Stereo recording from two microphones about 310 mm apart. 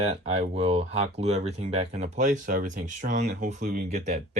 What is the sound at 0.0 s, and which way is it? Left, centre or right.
Speech, centre.